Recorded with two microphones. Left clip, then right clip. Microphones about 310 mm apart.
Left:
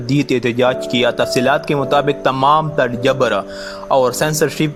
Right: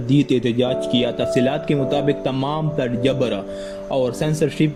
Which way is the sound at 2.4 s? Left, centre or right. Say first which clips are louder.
Left 12 dB; left.